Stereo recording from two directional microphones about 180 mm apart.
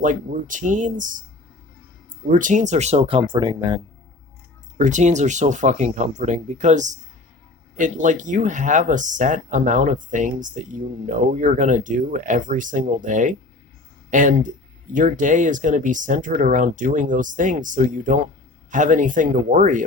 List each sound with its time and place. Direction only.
0.0 s speech: 45° right (ahead or behind); by 3.8 s 25° right (ahead or behind)
4.8 s speech: 40° right (ahead or behind)